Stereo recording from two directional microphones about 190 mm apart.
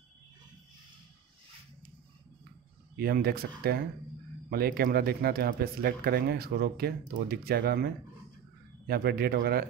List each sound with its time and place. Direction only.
3.0 s speech: 55° right (ahead or behind)
8.8 s speech: 55° right (ahead or behind)